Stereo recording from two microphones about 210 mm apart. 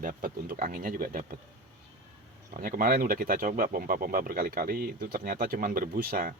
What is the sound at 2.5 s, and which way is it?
Speech, 40° right (ahead or behind).